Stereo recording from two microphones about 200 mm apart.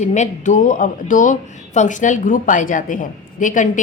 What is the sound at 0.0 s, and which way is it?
Speech, 35° left (ahead or behind).